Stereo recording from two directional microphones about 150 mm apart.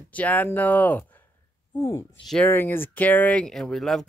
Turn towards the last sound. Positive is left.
turn(degrees=5)  # may be behind; listen again after turning